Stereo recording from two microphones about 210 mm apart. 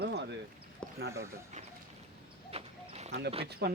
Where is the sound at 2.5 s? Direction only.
30° right (ahead or behind).